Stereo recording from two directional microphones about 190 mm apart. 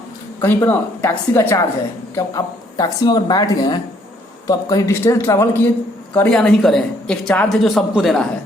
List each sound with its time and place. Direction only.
0.4 s a woman's voice: 10° left (ahead or behind)